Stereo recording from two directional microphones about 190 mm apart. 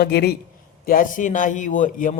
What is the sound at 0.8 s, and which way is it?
A man's voice, 45° left (ahead or behind).